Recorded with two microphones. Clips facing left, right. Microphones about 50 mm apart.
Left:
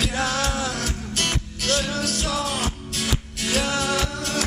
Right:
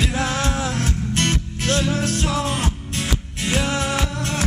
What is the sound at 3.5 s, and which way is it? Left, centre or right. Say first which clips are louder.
Music: right 1 dB; right.